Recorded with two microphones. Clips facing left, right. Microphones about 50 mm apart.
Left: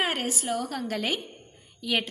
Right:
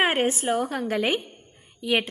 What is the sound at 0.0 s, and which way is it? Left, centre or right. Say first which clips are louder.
A woman's voice: right 6 dB; right.